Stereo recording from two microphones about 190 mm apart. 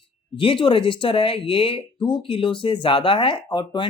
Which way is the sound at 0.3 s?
25° left (ahead or behind).